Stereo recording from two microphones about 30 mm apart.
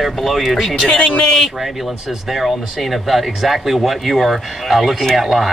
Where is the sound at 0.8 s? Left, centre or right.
Left.